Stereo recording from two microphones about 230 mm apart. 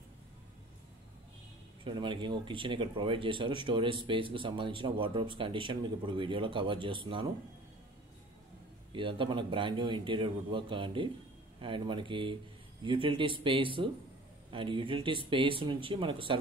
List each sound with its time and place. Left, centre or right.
1.9 s speech: right
8.9 s speech: right